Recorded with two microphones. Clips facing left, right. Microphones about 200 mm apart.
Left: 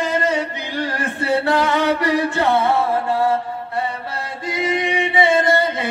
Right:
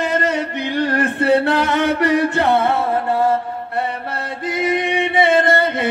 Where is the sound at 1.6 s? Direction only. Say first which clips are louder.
Right 1 dB; 60° right (ahead or behind).